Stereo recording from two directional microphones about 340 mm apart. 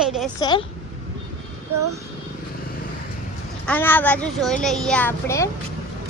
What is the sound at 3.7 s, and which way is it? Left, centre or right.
Speech, centre.